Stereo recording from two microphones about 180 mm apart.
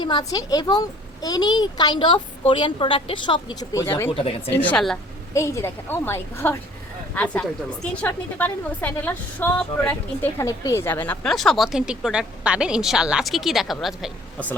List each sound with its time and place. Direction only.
0.0 s a child's voice: 25° left (ahead or behind)
4.4 s a woman's voice: 10° left (ahead or behind)